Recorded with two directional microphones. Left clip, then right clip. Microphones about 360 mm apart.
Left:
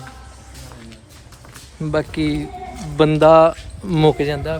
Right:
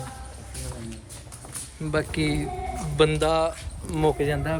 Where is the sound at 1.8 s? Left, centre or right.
Centre.